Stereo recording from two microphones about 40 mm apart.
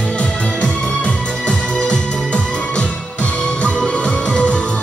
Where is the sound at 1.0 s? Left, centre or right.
Left.